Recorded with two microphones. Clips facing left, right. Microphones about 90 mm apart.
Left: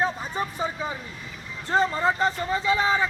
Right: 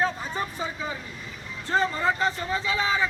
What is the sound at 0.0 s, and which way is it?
Vehicle, 15° left (ahead or behind).